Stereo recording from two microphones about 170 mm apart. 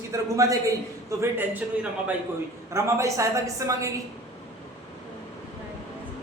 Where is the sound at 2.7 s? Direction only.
15° right (ahead or behind).